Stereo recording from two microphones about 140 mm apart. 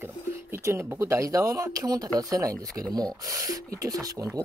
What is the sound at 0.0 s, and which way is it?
Speech, 15° right (ahead or behind).